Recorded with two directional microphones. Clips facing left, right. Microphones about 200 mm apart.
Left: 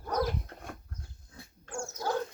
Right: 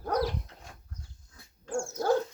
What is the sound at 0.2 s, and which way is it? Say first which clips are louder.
Dog: even; 50° left (ahead or behind).